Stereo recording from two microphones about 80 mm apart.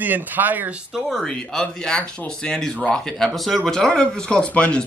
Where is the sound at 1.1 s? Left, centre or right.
Centre.